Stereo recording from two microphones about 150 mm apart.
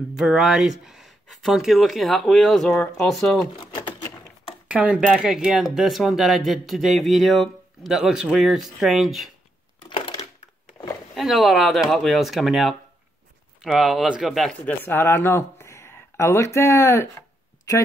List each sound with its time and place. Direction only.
0.1 s speech: centre (ahead or behind)
3.5 s typing: 30° left (ahead or behind)
4.6 s speech: 5° right (ahead or behind)
11.1 s speech: centre (ahead or behind)
14.9 s speech: 15° left (ahead or behind)